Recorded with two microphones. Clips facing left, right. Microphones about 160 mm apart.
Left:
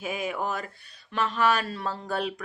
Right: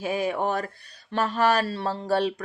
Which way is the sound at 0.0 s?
35° right (ahead or behind).